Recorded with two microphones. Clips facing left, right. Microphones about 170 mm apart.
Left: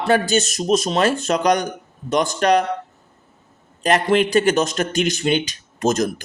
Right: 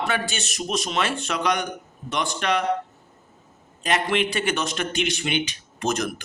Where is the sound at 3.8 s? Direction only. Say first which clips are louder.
Left 6 dB; 40° left (ahead or behind).